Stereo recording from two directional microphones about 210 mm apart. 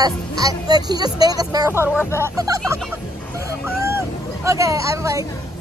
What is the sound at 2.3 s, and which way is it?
Speech, 15° right (ahead or behind).